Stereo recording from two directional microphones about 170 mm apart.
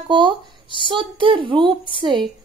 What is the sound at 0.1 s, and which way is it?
A woman's voice, 30° right (ahead or behind).